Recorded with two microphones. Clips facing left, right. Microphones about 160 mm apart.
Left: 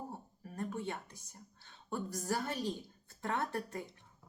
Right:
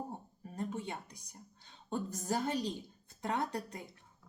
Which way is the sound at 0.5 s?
20° right (ahead or behind).